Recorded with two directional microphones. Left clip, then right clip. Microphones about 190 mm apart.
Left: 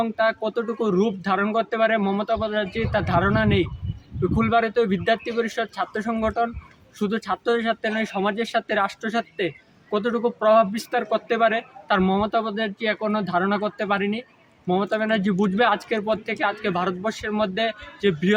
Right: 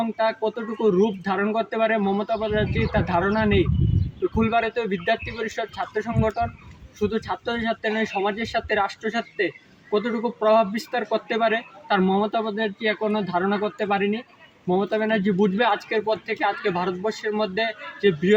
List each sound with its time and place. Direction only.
0.0 s speech: 15° left (ahead or behind)